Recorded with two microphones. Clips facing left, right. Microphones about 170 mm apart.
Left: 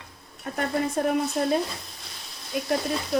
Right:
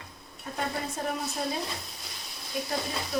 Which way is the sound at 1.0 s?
65° left (ahead or behind).